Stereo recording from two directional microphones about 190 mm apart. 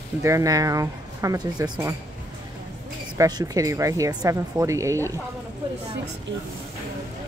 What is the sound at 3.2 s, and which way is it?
Speech, 20° right (ahead or behind).